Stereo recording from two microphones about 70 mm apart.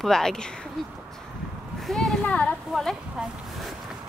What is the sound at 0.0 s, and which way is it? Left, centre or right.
Speech, centre.